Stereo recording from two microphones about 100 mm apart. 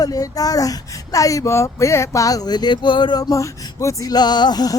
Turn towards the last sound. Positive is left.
turn(degrees=40)  # may be behind; listen again after turning